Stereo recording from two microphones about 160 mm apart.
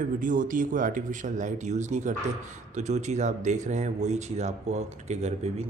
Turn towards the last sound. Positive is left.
turn(degrees=-45)  # may be behind; listen again after turning